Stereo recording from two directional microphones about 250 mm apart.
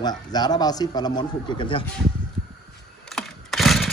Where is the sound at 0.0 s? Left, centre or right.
Centre.